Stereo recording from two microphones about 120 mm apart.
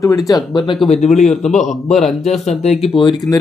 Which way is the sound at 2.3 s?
65° left (ahead or behind).